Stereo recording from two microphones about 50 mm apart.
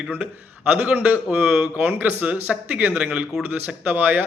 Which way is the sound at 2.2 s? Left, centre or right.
Right.